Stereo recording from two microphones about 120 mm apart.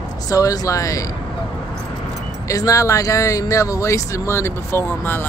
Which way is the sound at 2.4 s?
30° left (ahead or behind).